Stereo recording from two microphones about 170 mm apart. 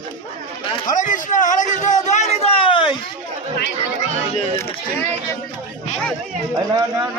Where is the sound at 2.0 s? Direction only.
45° left (ahead or behind).